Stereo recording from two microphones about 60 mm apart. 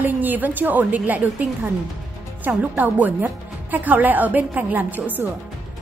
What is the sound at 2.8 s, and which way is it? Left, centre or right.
A woman's voice, right.